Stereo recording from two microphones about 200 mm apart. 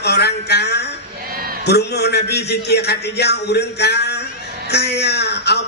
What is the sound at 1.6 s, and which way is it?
Speech, 55° left (ahead or behind).